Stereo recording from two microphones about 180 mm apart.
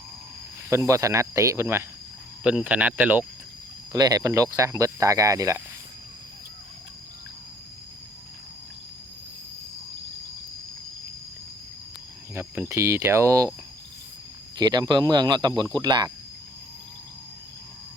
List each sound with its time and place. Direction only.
0.7 s speech: 15° right (ahead or behind)
3.9 s speech: 20° right (ahead or behind)
12.3 s speech: 15° right (ahead or behind)
14.5 s speech: 25° right (ahead or behind)